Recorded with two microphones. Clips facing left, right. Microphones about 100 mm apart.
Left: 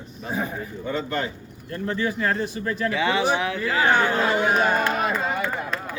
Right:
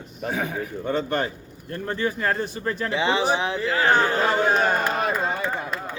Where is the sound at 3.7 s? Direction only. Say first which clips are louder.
Even; 20° left (ahead or behind).